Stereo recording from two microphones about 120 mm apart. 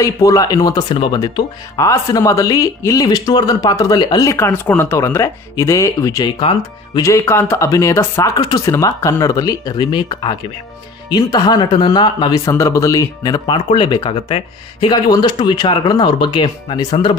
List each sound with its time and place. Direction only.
0.0 s speech: 30° left (ahead or behind)
4.3 s speech: 20° left (ahead or behind)
8.4 s speech: 35° left (ahead or behind)
8.6 s speech: 25° left (ahead or behind)
13.5 s speech: 45° left (ahead or behind)